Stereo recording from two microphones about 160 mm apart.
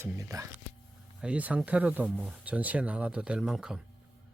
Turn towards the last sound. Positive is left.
turn(degrees=-5)  # may be behind; listen again after turning